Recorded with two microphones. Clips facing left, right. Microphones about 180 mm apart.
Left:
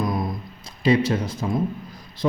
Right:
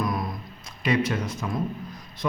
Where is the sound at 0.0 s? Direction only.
25° left (ahead or behind).